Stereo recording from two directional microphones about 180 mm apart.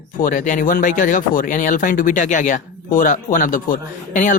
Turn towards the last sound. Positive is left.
turn(degrees=45)  # may be behind; listen again after turning